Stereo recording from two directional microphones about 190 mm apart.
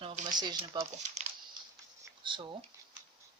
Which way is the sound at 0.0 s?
30° right (ahead or behind).